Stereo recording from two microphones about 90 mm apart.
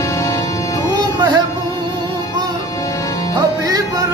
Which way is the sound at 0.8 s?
55° right (ahead or behind).